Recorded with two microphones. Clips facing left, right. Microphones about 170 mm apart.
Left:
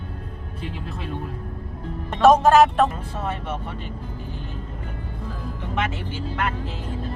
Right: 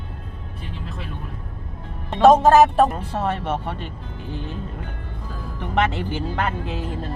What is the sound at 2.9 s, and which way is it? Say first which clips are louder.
Speech: right 5 dB; 70° right (ahead or behind).